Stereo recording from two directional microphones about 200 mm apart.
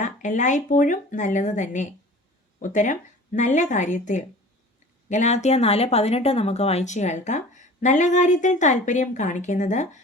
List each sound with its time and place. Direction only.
0.0 s speech: 40° left (ahead or behind)